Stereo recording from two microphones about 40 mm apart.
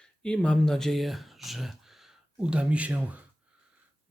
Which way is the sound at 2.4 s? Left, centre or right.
Right.